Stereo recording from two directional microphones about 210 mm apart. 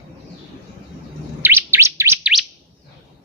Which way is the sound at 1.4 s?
10° right (ahead or behind).